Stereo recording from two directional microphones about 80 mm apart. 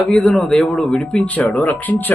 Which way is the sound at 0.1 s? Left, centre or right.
Centre.